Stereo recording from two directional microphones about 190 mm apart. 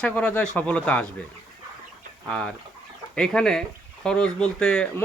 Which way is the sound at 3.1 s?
5° left (ahead or behind).